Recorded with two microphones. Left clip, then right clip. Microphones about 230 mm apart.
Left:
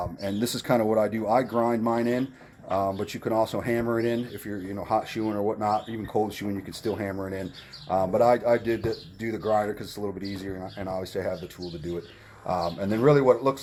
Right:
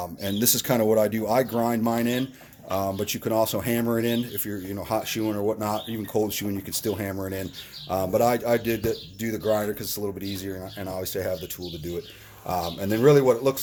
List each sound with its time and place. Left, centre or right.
0.2 s speech: right
12.5 s speech: right